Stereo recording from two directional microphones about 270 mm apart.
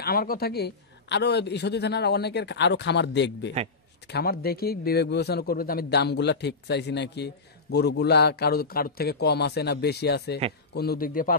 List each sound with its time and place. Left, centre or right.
0.0 s a man's voice: left